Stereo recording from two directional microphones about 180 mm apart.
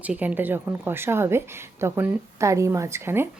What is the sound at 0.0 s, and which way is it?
A woman's voice, 10° right (ahead or behind).